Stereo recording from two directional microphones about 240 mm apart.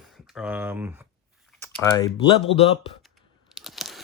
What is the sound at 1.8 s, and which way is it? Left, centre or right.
Speech, centre.